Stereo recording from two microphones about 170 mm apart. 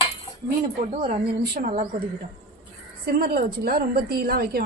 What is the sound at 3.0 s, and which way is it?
A woman's voice, 60° right (ahead or behind).